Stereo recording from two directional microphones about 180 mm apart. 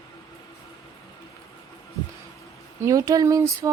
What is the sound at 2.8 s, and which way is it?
Speech, 15° right (ahead or behind).